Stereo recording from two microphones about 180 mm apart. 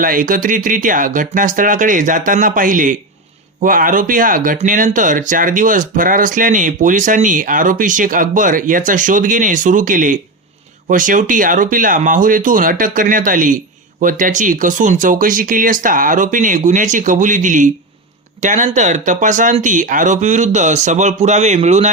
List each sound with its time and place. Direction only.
0.0 s speech: 50° right (ahead or behind)